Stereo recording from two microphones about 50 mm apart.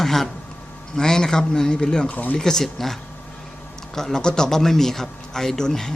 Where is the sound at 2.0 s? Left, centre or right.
Left.